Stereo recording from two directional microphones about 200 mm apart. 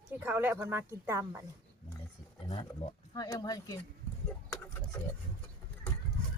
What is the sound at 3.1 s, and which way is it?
Speech, 15° left (ahead or behind).